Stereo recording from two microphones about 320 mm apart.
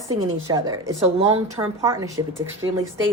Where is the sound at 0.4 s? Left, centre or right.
Centre.